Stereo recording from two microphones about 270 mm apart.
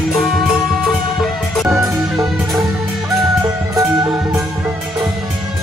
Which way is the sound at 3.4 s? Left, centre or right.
Centre.